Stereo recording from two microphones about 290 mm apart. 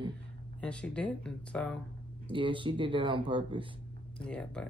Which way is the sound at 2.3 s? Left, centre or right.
Centre.